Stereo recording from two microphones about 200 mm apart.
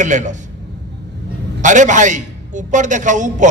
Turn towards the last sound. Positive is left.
turn(degrees=-40)  # may be behind; listen again after turning